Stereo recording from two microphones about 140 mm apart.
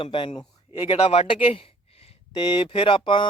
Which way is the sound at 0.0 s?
40° left (ahead or behind).